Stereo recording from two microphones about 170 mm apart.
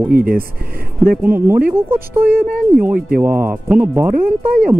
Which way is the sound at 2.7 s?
10° right (ahead or behind).